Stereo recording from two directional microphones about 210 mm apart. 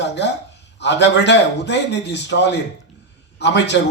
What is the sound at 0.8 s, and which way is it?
A man's voice, 55° left (ahead or behind).